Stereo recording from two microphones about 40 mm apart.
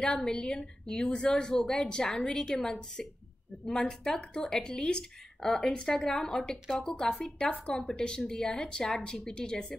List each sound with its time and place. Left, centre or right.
0.0 s a woman's voice: centre
6.0 s speech: centre
6.3 s a woman's voice: centre